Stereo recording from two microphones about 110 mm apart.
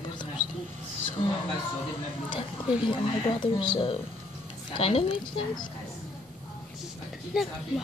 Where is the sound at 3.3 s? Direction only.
45° left (ahead or behind).